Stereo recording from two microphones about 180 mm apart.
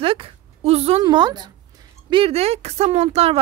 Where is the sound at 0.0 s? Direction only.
30° right (ahead or behind).